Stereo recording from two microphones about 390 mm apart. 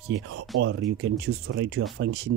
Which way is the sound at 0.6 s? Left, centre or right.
Right.